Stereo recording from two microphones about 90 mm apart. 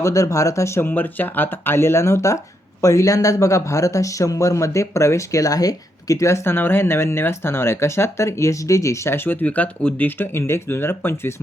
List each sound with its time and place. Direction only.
0.0 s speech: 40° left (ahead or behind)